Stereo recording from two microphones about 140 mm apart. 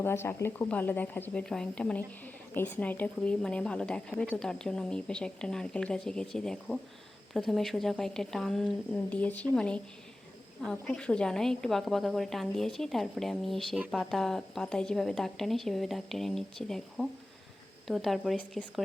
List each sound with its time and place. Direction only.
0.0 s a woman's voice: 15° left (ahead or behind)